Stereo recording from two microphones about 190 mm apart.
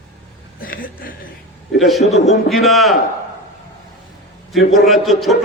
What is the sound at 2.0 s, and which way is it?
Speech, 35° left (ahead or behind).